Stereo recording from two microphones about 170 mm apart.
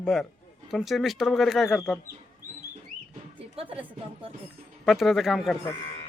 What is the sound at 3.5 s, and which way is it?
Music, 30° right (ahead or behind).